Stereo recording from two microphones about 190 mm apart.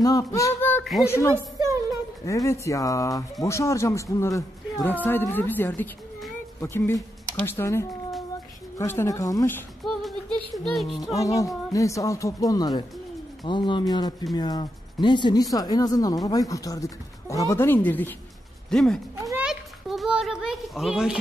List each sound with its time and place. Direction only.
0.0 s speech: 15° left (ahead or behind)
9.8 s music: centre (ahead or behind)
10.5 s speech: centre (ahead or behind)
11.1 s speech: 15° left (ahead or behind)
19.2 s a sound: 5° right (ahead or behind)